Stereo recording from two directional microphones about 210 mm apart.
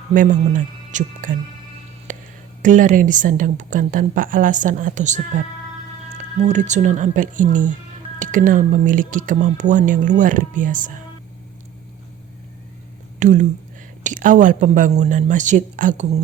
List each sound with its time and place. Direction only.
0.1 s a woman's voice: 40° right (ahead or behind)
2.1 s a sound: 40° right (ahead or behind)
2.6 s a woman's voice: 40° right (ahead or behind)
13.1 s a woman's voice: 35° right (ahead or behind)